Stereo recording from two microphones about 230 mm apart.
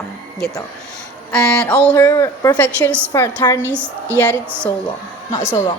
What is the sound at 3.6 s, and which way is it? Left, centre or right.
A woman's voice, centre.